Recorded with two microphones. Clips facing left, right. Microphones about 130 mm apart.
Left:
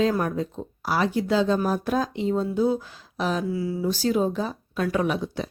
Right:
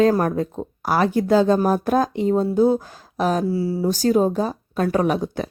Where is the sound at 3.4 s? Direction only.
30° right (ahead or behind); by 5.5 s 45° right (ahead or behind).